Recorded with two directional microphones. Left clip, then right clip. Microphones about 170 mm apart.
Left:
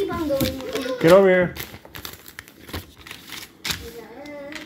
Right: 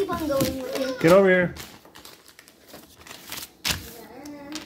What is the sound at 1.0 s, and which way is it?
Speech, 30° right (ahead or behind).